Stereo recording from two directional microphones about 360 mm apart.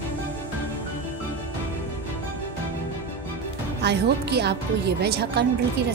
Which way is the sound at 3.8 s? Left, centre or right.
Right.